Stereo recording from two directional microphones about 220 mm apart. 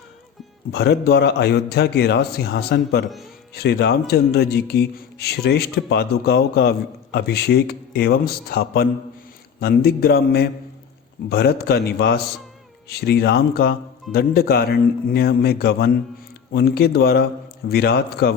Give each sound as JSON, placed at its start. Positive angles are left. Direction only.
{"t": 0.7, "sound": "speech", "side_deg": 50}